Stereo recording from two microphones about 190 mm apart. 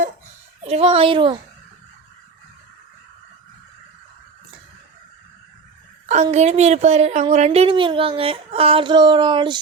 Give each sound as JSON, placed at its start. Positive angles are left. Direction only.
{"t": 0.7, "sound": "speech", "side_deg": -30}
{"t": 6.3, "sound": "speech", "side_deg": -35}